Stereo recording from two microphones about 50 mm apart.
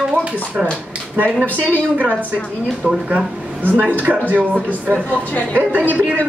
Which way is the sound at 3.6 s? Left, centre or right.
Right.